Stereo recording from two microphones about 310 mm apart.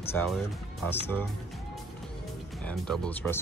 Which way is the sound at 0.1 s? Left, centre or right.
Centre.